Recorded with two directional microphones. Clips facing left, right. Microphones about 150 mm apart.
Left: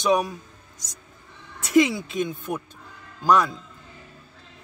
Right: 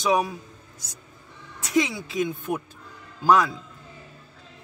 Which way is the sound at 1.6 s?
Centre (ahead or behind).